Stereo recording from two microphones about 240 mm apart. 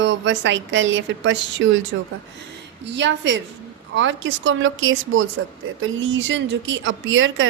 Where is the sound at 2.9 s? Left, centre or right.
Right.